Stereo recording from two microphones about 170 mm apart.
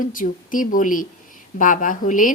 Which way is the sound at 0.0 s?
55° left (ahead or behind).